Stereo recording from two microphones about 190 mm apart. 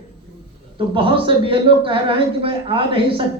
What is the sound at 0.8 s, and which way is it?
A man's voice, 25° right (ahead or behind).